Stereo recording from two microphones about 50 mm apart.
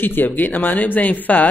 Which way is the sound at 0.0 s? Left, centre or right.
Left.